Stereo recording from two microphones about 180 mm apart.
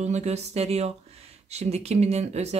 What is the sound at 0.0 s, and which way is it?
Speech, 40° right (ahead or behind).